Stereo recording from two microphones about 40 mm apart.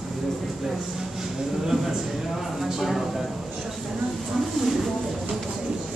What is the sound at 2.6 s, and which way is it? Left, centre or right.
Speech, centre.